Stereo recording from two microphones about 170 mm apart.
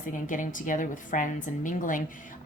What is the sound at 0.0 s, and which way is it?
A woman's voice, 50° left (ahead or behind).